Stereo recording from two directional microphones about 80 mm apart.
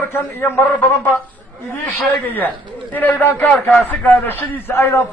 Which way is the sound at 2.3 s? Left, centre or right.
Left.